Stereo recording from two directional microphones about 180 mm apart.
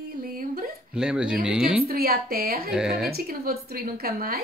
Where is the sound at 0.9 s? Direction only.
5° right (ahead or behind).